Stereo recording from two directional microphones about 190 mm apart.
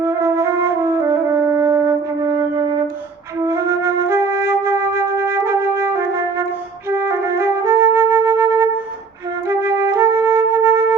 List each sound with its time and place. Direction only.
0.0 s music: 15° right (ahead or behind)
3.4 s flute: 15° right (ahead or behind)
6.9 s music: 15° right (ahead or behind)